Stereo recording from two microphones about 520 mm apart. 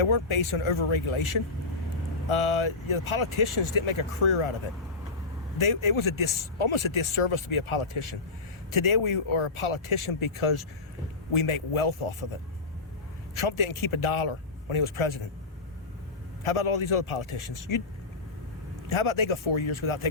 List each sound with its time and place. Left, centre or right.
0.0 s speech: left
5.5 s speech: left
13.3 s speech: left
16.4 s speech: left
18.9 s speech: left